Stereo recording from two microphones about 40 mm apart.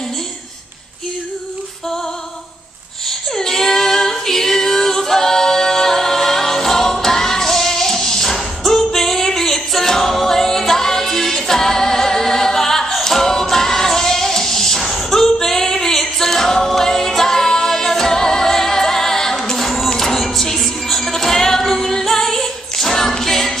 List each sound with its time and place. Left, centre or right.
3.1 s female singing: centre
19.6 s music: centre
19.9 s music: centre